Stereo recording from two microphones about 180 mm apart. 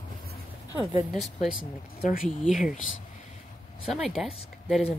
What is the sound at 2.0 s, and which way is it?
Speech, 55° left (ahead or behind).